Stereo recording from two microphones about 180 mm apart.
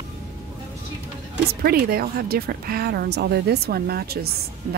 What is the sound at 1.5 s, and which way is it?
Speech, 55° right (ahead or behind).